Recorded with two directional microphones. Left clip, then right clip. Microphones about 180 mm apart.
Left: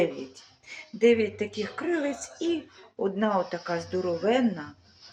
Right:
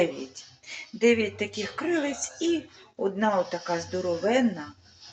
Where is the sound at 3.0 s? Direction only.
15° left (ahead or behind).